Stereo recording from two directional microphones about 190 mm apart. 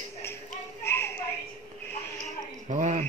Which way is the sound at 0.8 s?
10° left (ahead or behind).